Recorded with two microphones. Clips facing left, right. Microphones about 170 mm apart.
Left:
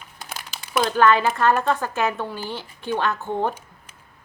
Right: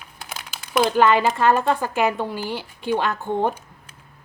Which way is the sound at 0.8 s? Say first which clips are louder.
Right 1 dB; 15° right (ahead or behind).